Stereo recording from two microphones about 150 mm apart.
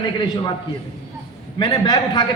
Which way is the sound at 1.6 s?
30° left (ahead or behind).